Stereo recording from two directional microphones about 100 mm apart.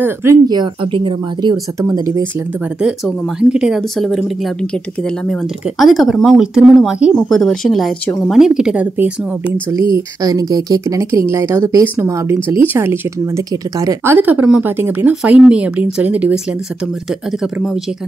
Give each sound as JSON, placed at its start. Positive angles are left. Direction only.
{"t": 0.0, "sound": "speech", "side_deg": -25}
{"t": 0.9, "sound": "speech", "side_deg": -50}
{"t": 1.8, "sound": "speech", "side_deg": -30}
{"t": 3.3, "sound": "speech", "side_deg": -5}
{"t": 5.3, "sound": "speech", "side_deg": 0}
{"t": 7.2, "sound": "speech", "side_deg": 5}
{"t": 9.7, "sound": "speech", "side_deg": -35}
{"t": 11.8, "sound": "speech", "side_deg": -25}
{"t": 14.1, "sound": "speech", "side_deg": -15}